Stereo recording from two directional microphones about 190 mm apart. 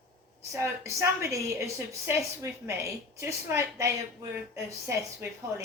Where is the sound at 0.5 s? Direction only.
15° right (ahead or behind).